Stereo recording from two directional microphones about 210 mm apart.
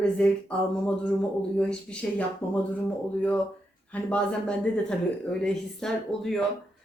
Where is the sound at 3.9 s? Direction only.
5° left (ahead or behind).